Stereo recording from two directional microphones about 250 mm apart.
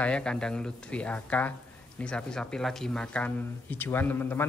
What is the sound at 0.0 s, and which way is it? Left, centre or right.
Speech, centre.